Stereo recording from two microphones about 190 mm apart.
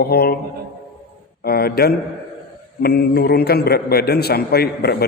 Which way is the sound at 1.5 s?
55° left (ahead or behind).